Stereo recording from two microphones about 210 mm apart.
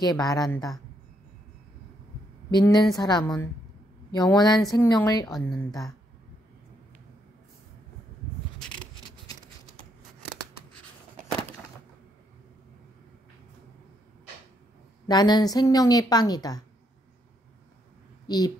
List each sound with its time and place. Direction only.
0.0 s a woman's voice: 20° left (ahead or behind)
2.5 s a woman's voice: 20° left (ahead or behind)
5.2 s speech: centre (ahead or behind)
8.5 s coin: 5° left (ahead or behind)
15.0 s a woman's voice: 20° left (ahead or behind)
18.3 s a woman's voice: 20° left (ahead or behind)